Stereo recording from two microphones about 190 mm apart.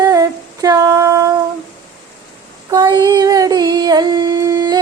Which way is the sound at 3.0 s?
20° right (ahead or behind).